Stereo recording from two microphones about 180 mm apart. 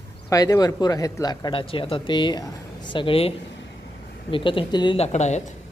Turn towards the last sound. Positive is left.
turn(degrees=40)  # may be behind; listen again after turning